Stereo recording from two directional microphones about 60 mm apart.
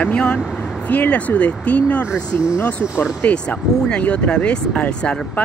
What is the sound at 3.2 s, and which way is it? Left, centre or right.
Speech, left.